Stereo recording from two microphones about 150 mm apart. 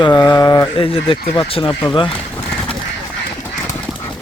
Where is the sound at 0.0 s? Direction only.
30° left (ahead or behind).